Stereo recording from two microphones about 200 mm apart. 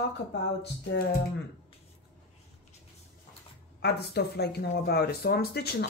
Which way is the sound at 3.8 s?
55° left (ahead or behind).